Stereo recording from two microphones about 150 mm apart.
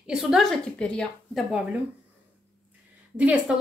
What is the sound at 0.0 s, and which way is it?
Speech, 5° right (ahead or behind).